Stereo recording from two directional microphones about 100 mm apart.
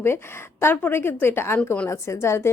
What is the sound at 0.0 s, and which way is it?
A woman's voice, 25° left (ahead or behind).